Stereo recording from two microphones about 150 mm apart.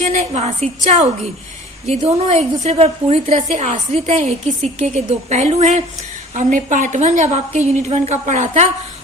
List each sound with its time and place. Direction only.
0.0 s a woman's voice: 50° right (ahead or behind)